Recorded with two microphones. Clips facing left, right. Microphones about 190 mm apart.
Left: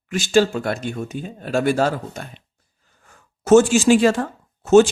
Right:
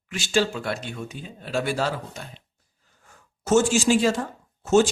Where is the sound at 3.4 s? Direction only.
65° left (ahead or behind).